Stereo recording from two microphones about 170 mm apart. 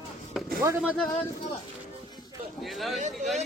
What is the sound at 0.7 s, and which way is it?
Speech, 5° left (ahead or behind).